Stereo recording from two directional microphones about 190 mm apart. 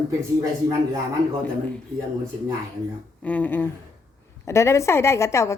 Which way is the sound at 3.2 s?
10° left (ahead or behind).